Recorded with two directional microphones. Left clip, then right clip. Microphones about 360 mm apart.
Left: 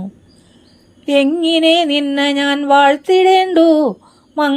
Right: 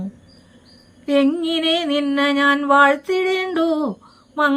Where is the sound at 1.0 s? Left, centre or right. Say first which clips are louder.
Left 5 dB; centre.